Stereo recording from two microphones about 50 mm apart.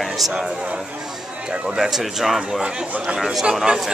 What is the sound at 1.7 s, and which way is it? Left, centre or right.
Speech, centre.